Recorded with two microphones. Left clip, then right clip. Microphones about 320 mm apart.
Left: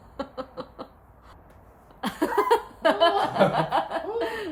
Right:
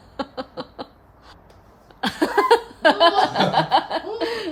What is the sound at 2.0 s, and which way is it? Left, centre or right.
Chuckle, right.